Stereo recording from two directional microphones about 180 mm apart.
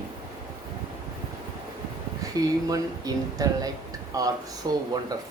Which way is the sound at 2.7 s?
20° right (ahead or behind).